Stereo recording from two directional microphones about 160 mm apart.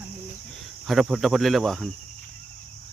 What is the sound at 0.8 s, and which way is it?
Speech, centre (ahead or behind).